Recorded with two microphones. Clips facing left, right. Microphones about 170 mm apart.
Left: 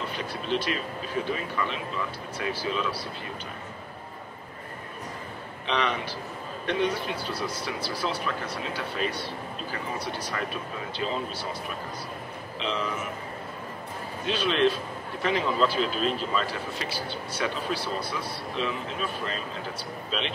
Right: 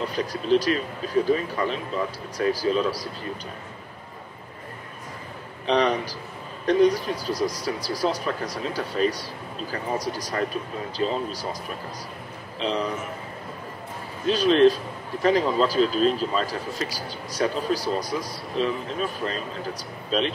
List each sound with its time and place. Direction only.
0.0 s speech: 40° right (ahead or behind)
5.7 s speech: 40° right (ahead or behind)
12.5 s speech: 35° right (ahead or behind)
14.2 s speech: 40° right (ahead or behind)